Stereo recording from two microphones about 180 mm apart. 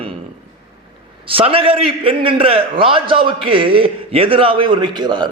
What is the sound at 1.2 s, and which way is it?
A man's voice, 30° right (ahead or behind).